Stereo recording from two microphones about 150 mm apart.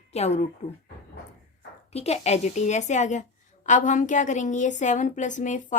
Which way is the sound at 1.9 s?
45° left (ahead or behind).